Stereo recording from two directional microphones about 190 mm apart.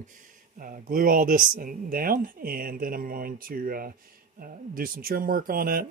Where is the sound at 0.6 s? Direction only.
45° right (ahead or behind).